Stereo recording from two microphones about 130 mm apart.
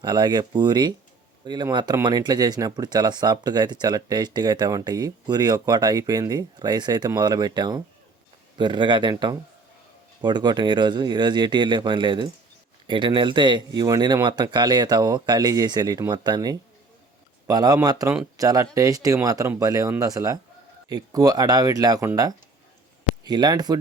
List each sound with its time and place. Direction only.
0.0 s speech: 35° right (ahead or behind)